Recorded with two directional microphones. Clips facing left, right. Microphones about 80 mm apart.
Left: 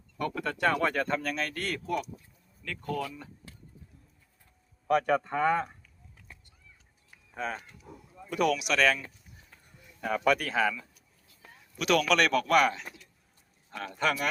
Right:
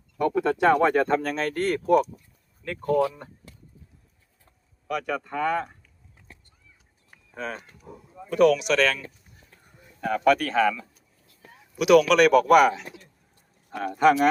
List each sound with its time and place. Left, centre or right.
0.2 s a sound: centre
0.7 s speech: right
4.9 s speech: left
7.3 s speech: centre
7.9 s a sound: centre
8.3 s speech: centre
11.7 s speech: centre